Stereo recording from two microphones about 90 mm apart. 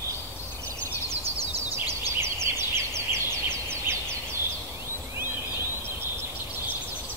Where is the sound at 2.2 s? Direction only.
30° right (ahead or behind).